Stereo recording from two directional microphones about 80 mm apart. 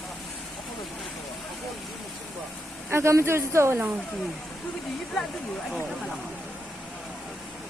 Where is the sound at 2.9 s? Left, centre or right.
Right.